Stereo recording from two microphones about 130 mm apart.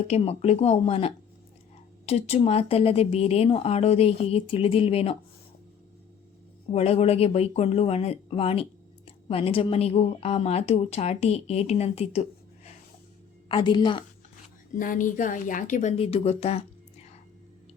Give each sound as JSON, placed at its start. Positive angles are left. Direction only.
{"t": 0.1, "sound": "speech", "side_deg": 55}
{"t": 6.7, "sound": "speech", "side_deg": 55}
{"t": 13.5, "sound": "a woman's voice", "side_deg": 35}
{"t": 14.8, "sound": "a woman's voice", "side_deg": 90}